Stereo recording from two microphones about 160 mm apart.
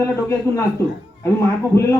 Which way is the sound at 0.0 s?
20° left (ahead or behind).